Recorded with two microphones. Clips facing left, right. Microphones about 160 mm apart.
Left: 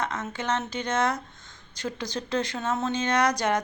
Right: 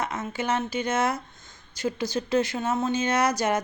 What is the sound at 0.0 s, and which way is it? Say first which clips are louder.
Speech: right 1 dB; 10° right (ahead or behind).